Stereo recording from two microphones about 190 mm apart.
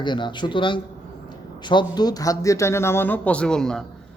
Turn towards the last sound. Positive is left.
turn(degrees=5)  # may be behind; listen again after turning